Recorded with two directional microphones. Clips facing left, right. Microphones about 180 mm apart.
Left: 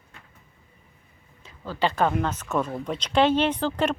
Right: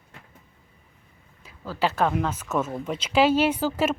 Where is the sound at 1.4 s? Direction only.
5° right (ahead or behind).